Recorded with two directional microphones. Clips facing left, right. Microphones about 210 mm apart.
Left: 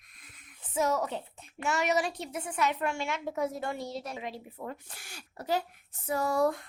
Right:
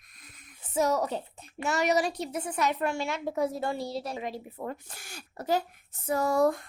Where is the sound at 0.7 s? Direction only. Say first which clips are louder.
Right 3 dB; 40° right (ahead or behind).